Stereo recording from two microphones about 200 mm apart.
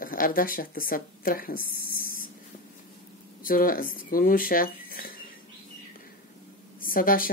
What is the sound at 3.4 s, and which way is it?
Speech, 45° left (ahead or behind).